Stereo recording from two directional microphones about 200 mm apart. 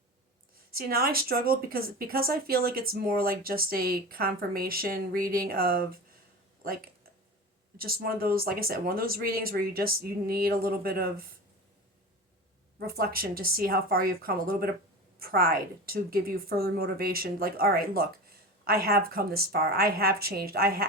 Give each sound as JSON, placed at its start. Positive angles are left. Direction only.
{"t": 0.7, "sound": "speech", "side_deg": -50}
{"t": 6.7, "sound": "a sound", "side_deg": -50}
{"t": 7.8, "sound": "speech", "side_deg": -50}
{"t": 12.8, "sound": "speech", "side_deg": -50}